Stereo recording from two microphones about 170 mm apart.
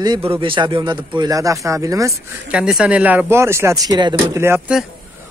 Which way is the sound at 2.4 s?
5° right (ahead or behind).